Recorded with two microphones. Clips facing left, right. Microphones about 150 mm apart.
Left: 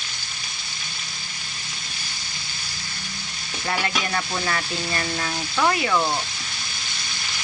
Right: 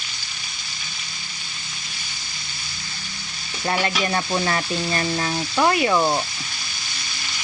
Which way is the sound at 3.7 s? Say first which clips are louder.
Right 3 dB; 30° right (ahead or behind).